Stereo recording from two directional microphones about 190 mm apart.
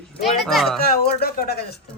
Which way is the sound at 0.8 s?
55° left (ahead or behind).